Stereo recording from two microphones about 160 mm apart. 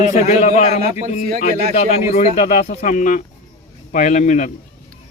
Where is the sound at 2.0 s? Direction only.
50° left (ahead or behind).